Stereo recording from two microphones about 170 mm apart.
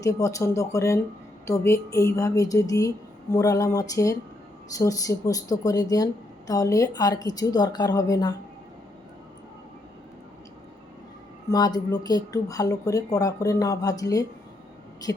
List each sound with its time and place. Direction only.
0.0 s speech: 20° left (ahead or behind)
11.4 s speech: 25° left (ahead or behind)